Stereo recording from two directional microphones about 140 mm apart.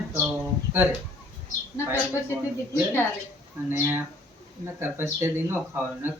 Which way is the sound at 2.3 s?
15° left (ahead or behind).